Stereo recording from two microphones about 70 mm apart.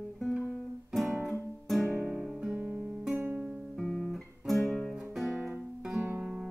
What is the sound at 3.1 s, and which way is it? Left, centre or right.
Music, right.